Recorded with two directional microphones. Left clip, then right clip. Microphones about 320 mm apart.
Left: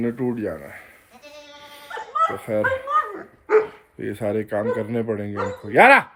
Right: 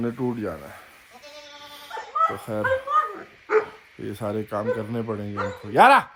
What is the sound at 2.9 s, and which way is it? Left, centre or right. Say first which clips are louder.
Dog: even; left.